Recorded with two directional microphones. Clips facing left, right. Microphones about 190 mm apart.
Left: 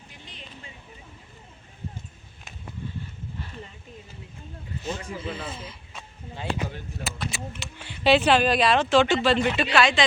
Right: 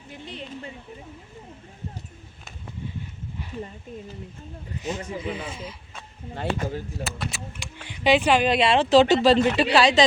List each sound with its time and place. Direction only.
4.8 s speech: 15° right (ahead or behind)
6.3 s speech: 55° right (ahead or behind)
7.0 s speech: centre (ahead or behind)
7.6 s speech: 15° right (ahead or behind); by 10.0 s 35° right (ahead or behind)